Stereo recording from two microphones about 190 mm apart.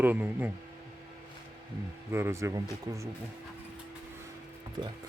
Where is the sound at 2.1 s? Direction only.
15° right (ahead or behind).